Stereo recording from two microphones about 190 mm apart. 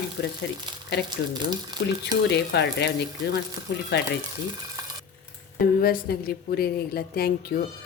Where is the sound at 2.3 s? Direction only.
60° left (ahead or behind).